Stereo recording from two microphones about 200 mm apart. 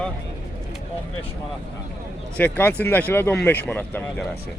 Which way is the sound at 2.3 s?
10° left (ahead or behind).